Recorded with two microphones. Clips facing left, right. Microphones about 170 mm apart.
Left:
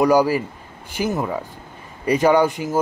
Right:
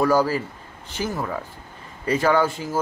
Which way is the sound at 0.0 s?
15° left (ahead or behind).